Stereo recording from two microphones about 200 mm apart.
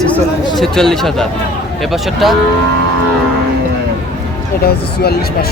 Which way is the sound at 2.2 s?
Centre (ahead or behind).